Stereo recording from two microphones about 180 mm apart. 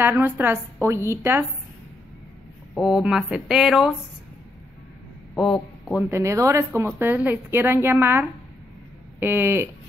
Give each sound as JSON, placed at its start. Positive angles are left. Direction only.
{"t": 0.0, "sound": "speech", "side_deg": -10}
{"t": 2.7, "sound": "speech", "side_deg": 0}
{"t": 5.3, "sound": "speech", "side_deg": 5}
{"t": 6.0, "sound": "speech", "side_deg": -15}